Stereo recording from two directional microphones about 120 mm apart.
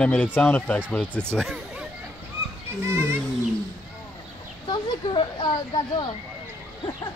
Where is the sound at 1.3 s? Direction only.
Centre (ahead or behind).